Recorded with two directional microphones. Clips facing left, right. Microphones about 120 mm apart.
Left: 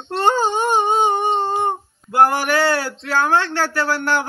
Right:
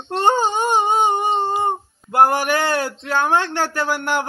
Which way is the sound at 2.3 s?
15° right (ahead or behind).